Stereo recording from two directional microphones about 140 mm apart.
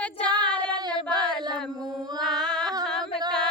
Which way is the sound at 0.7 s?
30° right (ahead or behind).